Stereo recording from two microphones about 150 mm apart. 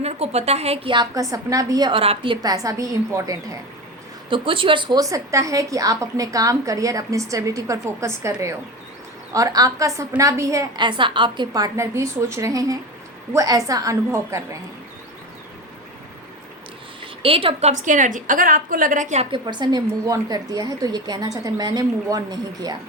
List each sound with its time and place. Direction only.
0.0 s a woman's voice: 45° right (ahead or behind)
0.9 s a woman's voice: 25° right (ahead or behind)
4.3 s a woman's voice: 35° right (ahead or behind); by 14.4 s 20° right (ahead or behind)
17.2 s a woman's voice: 40° right (ahead or behind)
19.3 s a woman's voice: 30° right (ahead or behind)